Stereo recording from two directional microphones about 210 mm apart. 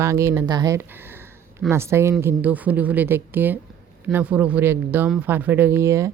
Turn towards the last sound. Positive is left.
turn(degrees=-15)  # may be behind; listen again after turning